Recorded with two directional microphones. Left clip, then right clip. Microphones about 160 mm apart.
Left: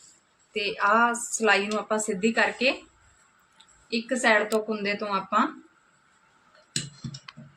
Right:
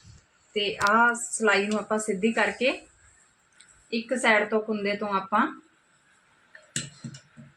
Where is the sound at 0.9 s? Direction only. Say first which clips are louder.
Right 1 dB; 15° right (ahead or behind).